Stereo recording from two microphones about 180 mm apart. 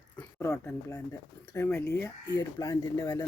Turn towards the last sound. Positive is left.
turn(degrees=15)  # may be behind; listen again after turning